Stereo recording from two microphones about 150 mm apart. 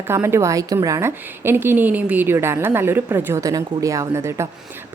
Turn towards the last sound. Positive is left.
turn(degrees=-20)  # may be behind; listen again after turning